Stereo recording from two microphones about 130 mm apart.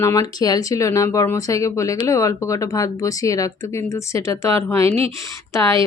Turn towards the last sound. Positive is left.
turn(degrees=20)  # may be behind; listen again after turning